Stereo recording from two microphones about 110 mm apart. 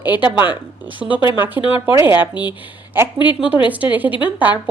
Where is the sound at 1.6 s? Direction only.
55° left (ahead or behind).